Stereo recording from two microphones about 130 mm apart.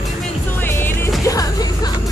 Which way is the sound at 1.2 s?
30° left (ahead or behind).